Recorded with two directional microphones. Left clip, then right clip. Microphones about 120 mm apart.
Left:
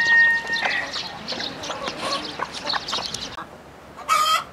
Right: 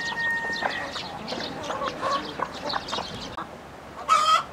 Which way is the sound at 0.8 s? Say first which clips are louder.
Left 3 dB; 30° right (ahead or behind).